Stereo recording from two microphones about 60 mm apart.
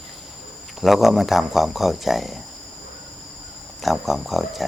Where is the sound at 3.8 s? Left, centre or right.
Centre.